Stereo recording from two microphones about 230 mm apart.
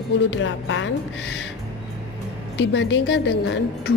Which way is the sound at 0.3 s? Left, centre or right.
Left.